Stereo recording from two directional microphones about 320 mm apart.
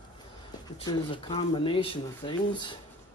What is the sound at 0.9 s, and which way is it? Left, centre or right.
Speech, centre.